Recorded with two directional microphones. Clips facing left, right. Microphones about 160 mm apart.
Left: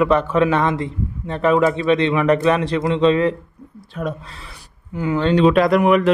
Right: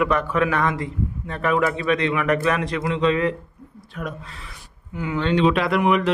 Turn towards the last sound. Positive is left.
turn(degrees=50)  # may be behind; listen again after turning